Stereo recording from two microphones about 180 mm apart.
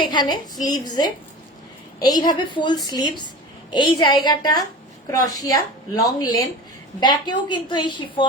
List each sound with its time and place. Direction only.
0.0 s a woman's voice: 25° left (ahead or behind)